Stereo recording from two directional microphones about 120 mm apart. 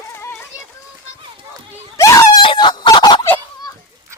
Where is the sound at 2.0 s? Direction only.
30° left (ahead or behind).